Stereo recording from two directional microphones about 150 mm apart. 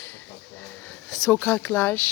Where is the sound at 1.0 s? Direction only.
10° left (ahead or behind).